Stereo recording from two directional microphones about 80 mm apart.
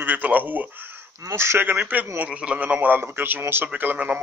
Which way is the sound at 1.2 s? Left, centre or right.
Right.